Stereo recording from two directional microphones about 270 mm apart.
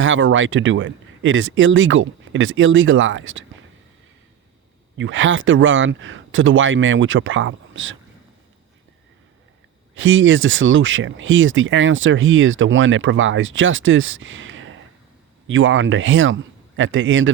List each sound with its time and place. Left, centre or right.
0.0 s speech: right
4.9 s speech: right
9.9 s speech: right